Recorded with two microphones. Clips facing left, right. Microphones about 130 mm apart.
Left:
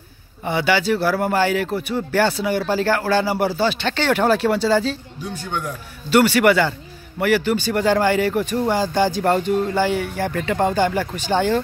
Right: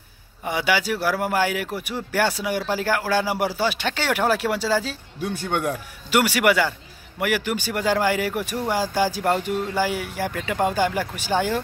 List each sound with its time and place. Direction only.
0.5 s speech: 10° right (ahead or behind)
5.2 s speech: 65° right (ahead or behind)
6.0 s speech: 10° right (ahead or behind)